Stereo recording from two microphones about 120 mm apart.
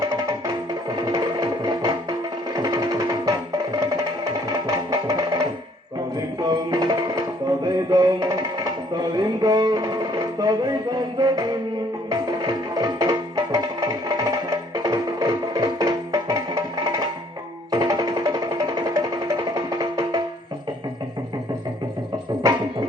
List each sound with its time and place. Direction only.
0.0 s music: 25° right (ahead or behind)